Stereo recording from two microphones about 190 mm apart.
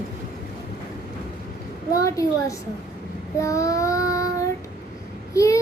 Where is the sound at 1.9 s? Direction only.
15° left (ahead or behind).